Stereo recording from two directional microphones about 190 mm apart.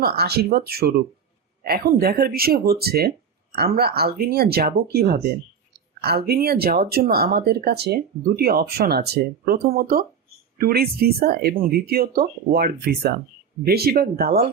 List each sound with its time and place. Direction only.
0.0 s speech: 55° right (ahead or behind)